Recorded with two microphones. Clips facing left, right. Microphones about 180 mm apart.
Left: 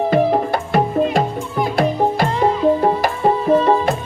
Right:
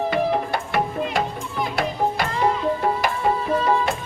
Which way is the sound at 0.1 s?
40° left (ahead or behind).